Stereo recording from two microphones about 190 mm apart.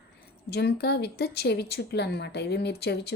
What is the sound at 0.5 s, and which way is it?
Speech, 60° left (ahead or behind).